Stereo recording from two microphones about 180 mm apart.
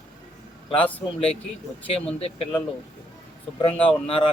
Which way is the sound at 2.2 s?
35° left (ahead or behind).